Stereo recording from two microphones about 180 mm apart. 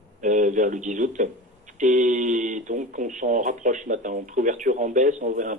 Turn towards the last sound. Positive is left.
turn(degrees=-45)  # may be behind; listen again after turning